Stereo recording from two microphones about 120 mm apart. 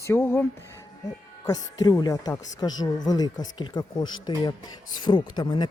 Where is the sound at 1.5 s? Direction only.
30° left (ahead or behind).